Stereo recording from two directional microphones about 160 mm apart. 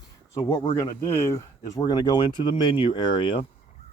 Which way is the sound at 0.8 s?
15° left (ahead or behind).